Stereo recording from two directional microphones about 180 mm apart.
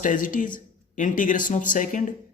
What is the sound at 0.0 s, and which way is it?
Speech, 45° left (ahead or behind).